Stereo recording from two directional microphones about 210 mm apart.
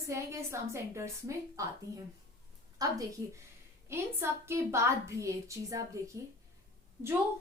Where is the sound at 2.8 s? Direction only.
15° right (ahead or behind).